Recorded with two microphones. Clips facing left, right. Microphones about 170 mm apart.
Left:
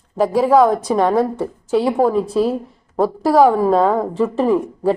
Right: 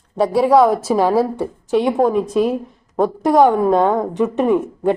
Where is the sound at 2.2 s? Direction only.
30° left (ahead or behind).